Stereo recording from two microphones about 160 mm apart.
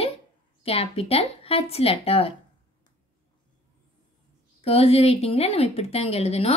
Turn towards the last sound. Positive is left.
turn(degrees=40)  # may be behind; listen again after turning